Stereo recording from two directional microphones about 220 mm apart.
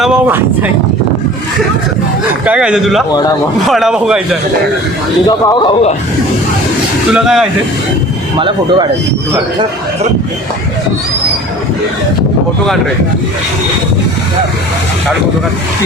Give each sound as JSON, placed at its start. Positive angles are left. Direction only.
{"t": 0.0, "sound": "speech", "side_deg": -5}
{"t": 2.5, "sound": "speech", "side_deg": -5}
{"t": 3.1, "sound": "a man's voice", "side_deg": 20}
{"t": 3.7, "sound": "speech", "side_deg": 0}
{"t": 5.3, "sound": "a man's voice", "side_deg": 20}
{"t": 7.1, "sound": "speech", "side_deg": -5}
{"t": 8.4, "sound": "speech", "side_deg": -20}